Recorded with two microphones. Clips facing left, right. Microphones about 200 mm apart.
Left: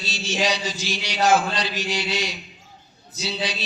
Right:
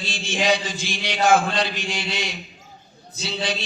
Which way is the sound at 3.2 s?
50° right (ahead or behind).